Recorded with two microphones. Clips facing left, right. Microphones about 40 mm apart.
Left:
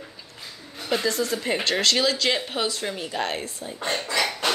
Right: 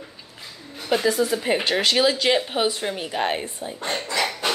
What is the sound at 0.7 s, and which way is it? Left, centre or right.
Speech, centre.